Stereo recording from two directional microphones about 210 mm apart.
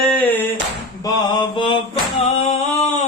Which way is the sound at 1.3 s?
20° left (ahead or behind).